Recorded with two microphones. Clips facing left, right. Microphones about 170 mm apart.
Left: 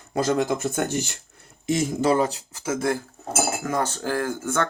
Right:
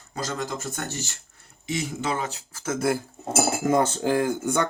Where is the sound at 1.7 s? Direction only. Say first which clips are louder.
Left 7 dB; 45° left (ahead or behind).